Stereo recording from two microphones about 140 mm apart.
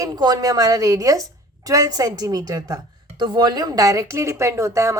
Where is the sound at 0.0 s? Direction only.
30° right (ahead or behind).